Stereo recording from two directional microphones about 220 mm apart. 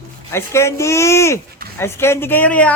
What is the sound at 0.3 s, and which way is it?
Speech, 10° left (ahead or behind).